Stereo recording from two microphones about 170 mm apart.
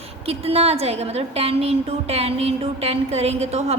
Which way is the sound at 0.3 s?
35° right (ahead or behind).